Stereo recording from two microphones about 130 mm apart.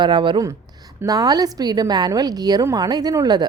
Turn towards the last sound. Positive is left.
turn(degrees=-30)  # may be behind; listen again after turning